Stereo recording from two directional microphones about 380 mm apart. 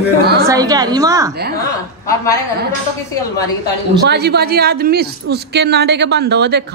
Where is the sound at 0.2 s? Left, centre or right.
Right.